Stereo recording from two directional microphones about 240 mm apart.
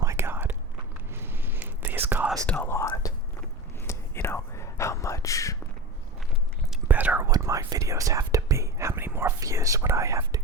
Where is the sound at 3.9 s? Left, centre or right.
Centre.